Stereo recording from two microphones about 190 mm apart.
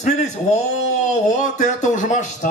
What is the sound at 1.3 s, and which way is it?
Speech, 40° left (ahead or behind).